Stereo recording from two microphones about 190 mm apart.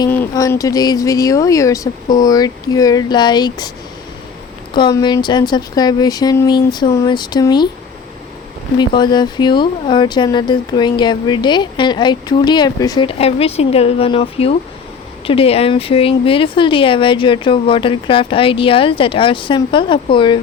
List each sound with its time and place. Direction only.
0.1 s speech: 15° left (ahead or behind)
4.7 s speech: 20° left (ahead or behind)
8.8 s speech: 25° left (ahead or behind)